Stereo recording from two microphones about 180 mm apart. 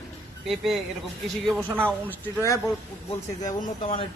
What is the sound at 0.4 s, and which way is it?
Speech, centre (ahead or behind).